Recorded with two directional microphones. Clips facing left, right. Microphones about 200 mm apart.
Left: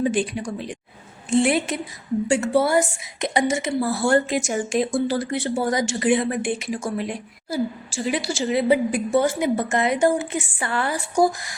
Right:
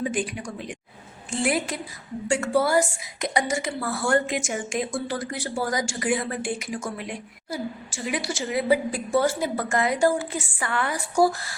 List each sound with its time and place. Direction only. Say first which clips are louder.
0.0 s a woman's voice: left 5 dB; 30° left (ahead or behind)
11.1 s speech: left 1 dB; 15° left (ahead or behind)